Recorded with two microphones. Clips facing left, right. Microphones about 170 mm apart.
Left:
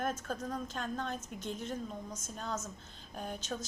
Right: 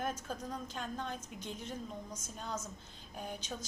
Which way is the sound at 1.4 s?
50° left (ahead or behind).